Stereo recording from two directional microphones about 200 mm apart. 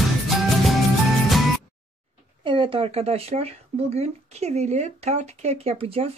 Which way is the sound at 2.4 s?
25° right (ahead or behind).